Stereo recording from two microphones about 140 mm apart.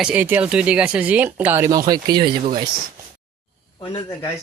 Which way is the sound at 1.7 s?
25° right (ahead or behind).